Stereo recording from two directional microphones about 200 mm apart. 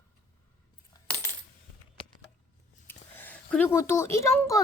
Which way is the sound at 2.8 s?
10° left (ahead or behind).